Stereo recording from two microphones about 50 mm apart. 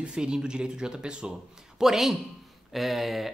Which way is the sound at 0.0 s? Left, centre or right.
Centre.